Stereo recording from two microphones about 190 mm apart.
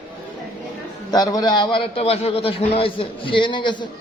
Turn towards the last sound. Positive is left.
turn(degrees=25)  # may be behind; listen again after turning